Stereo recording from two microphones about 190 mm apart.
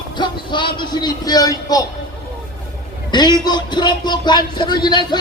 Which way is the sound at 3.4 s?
20° left (ahead or behind).